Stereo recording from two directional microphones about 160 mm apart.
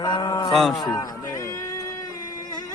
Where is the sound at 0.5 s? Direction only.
Centre (ahead or behind).